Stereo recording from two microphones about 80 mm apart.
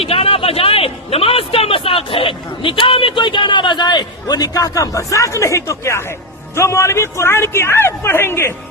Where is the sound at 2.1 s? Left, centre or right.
Left.